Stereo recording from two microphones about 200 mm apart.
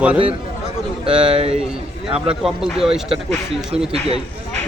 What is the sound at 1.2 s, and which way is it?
A man's voice, 25° right (ahead or behind).